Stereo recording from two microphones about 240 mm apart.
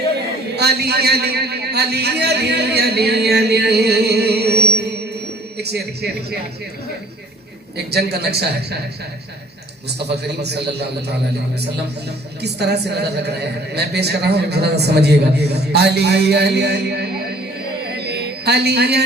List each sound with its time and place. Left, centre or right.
0.5 s a woman's voice: right
7.9 s a woman's voice: right
10.0 s a woman's voice: right
12.4 s a woman's voice: right
17.9 s a sound: right